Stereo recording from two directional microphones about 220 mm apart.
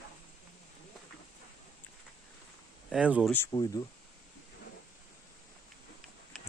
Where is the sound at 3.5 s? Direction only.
20° left (ahead or behind).